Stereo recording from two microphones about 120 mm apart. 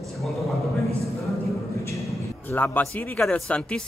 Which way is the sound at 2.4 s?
15° left (ahead or behind).